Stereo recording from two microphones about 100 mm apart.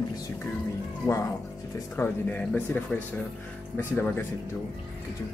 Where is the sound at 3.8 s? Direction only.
20° left (ahead or behind).